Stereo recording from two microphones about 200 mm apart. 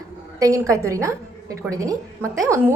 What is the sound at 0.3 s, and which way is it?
A woman's voice, 15° right (ahead or behind).